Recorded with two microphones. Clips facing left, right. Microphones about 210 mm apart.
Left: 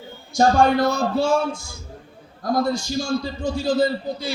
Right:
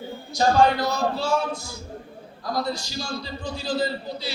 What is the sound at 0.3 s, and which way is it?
Speech, 50° left (ahead or behind).